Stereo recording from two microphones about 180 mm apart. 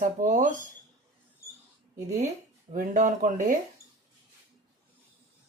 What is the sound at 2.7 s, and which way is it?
Speech, 45° right (ahead or behind).